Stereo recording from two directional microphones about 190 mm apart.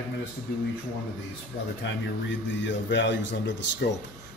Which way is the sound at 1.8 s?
75° left (ahead or behind).